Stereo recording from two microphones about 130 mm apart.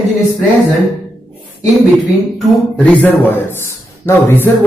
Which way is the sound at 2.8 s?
10° left (ahead or behind).